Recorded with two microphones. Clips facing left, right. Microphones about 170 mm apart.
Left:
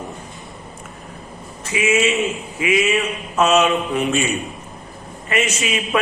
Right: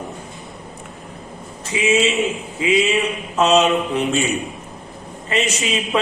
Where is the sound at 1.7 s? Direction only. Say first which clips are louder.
Even; 25° right (ahead or behind).